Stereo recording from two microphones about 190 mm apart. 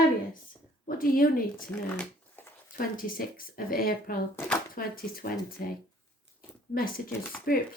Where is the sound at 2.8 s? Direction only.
50° left (ahead or behind).